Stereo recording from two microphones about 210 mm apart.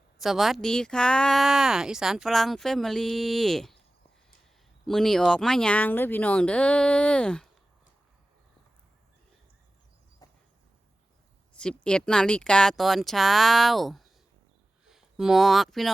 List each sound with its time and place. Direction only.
0.2 s speech: centre (ahead or behind)
4.9 s speech: centre (ahead or behind)
10.2 s a sound: 15° left (ahead or behind)
11.5 s speech: 5° left (ahead or behind)